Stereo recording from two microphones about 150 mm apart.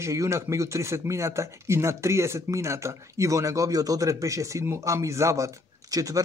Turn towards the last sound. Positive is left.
turn(degrees=-25)  # may be behind; listen again after turning